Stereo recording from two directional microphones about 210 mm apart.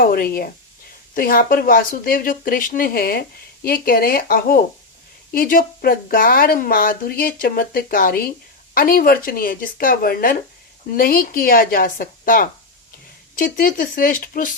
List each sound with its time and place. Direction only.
0.0 s speech: 45° left (ahead or behind)